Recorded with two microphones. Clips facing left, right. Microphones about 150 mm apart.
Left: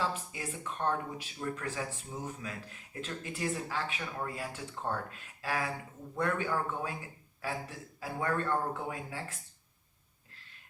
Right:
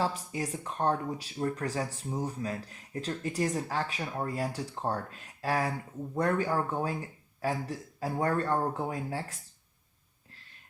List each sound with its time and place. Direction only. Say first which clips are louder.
0.0 s speech: right 4 dB; 40° right (ahead or behind)